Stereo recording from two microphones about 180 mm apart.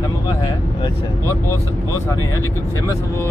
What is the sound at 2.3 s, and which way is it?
Speech, 15° left (ahead or behind).